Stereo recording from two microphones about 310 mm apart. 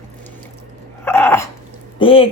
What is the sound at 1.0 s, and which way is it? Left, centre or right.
Dog, centre.